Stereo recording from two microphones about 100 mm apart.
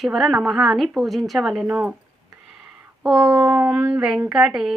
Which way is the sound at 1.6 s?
15° right (ahead or behind).